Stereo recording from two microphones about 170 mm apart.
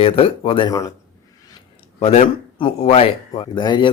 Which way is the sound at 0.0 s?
35° left (ahead or behind).